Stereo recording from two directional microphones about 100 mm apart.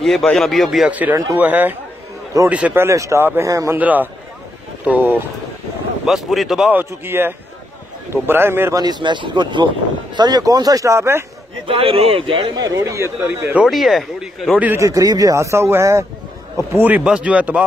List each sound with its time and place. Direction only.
0.0 s speech: 5° left (ahead or behind)
0.8 s a man's voice: 15° right (ahead or behind); by 3.7 s 30° right (ahead or behind)
3.7 s a man's voice: 15° right (ahead or behind)
6.0 s speech: 5° right (ahead or behind)
6.7 s speech: 20° right (ahead or behind)
8.7 s speech: 45° right (ahead or behind); by 11.2 s 25° right (ahead or behind)
11.6 s speech: 70° right (ahead or behind)
12.5 s speech: 35° right (ahead or behind); by 13.7 s 20° right (ahead or behind)
13.7 s speech: centre (ahead or behind)
14.8 s a man's voice: 35° right (ahead or behind); by 17.6 s 15° right (ahead or behind)